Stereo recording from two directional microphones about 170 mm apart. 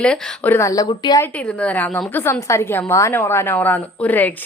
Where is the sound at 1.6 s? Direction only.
10° left (ahead or behind).